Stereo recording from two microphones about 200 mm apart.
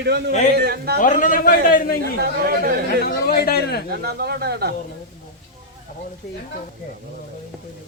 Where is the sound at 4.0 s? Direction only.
50° right (ahead or behind).